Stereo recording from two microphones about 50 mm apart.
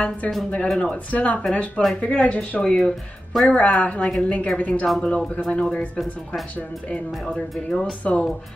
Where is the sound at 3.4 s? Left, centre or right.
Left.